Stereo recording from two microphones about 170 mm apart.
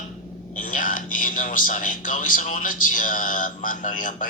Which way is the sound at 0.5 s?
50° left (ahead or behind).